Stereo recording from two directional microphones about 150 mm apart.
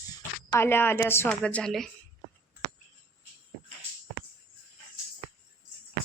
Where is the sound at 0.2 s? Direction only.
15° left (ahead or behind).